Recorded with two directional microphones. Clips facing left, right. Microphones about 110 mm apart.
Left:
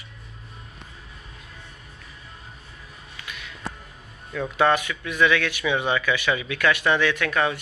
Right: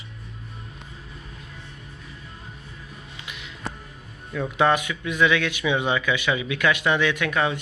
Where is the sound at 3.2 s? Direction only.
20° right (ahead or behind).